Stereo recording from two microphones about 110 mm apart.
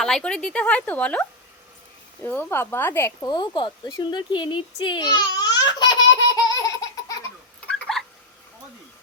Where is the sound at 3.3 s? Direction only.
40° left (ahead or behind).